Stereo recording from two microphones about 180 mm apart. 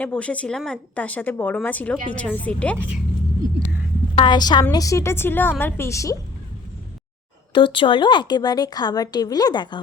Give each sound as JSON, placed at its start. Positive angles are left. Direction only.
{"t": 0.0, "sound": "a woman's voice", "side_deg": 5}
{"t": 4.2, "sound": "a woman's voice", "side_deg": 25}
{"t": 7.5, "sound": "speech", "side_deg": 25}